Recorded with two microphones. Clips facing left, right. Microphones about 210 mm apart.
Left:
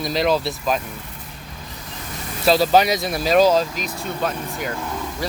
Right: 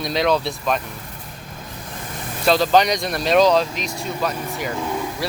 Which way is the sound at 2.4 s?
5° left (ahead or behind).